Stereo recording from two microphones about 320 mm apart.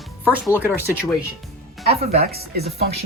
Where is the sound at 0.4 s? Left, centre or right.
Centre.